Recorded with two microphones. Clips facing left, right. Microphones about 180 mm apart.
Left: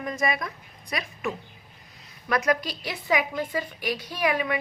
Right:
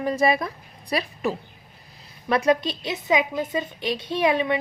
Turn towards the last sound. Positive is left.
turn(degrees=-25)  # may be behind; listen again after turning